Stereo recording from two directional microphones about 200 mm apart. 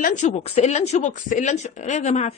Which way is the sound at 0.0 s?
40° left (ahead or behind).